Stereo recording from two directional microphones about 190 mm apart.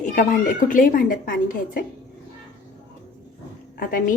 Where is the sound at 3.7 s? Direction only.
45° left (ahead or behind).